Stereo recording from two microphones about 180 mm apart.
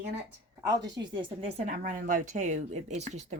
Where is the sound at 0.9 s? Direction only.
25° right (ahead or behind).